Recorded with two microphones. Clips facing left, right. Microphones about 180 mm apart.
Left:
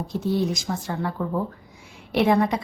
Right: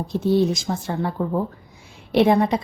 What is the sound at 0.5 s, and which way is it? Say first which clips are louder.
Speech: right 3 dB; 25° right (ahead or behind).